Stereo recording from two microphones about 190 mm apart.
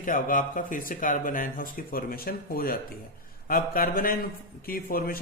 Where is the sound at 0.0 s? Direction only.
45° left (ahead or behind).